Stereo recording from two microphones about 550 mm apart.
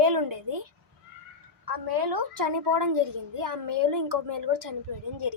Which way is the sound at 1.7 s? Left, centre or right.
Right.